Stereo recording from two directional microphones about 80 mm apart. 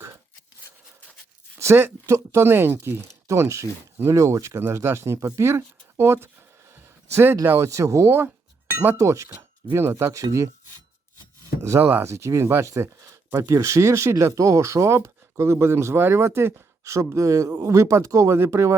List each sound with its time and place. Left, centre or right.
1.6 s speech: right
7.4 s speech: right
11.6 s speech: right